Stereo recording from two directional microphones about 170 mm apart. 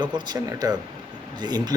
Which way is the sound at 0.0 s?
25° right (ahead or behind).